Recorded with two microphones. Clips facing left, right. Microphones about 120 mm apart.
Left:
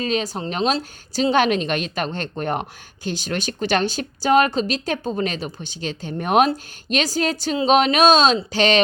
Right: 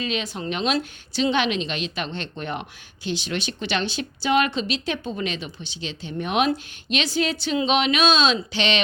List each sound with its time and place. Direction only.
0.0 s a woman's voice: 40° left (ahead or behind)